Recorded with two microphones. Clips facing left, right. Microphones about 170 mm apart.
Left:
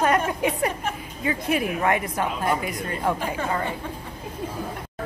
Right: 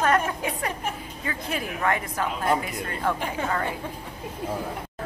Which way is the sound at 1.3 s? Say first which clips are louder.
Left 7 dB; 15° left (ahead or behind).